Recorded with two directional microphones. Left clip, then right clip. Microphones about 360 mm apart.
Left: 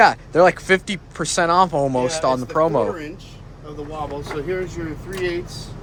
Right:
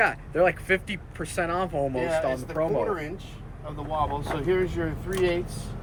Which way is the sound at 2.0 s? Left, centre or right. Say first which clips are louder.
Left 5 dB; centre.